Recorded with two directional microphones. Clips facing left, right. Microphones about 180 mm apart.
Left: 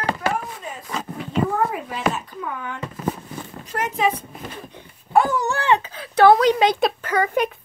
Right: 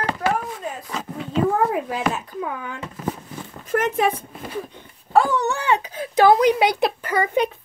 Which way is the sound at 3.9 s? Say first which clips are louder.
Right 1 dB; 55° right (ahead or behind).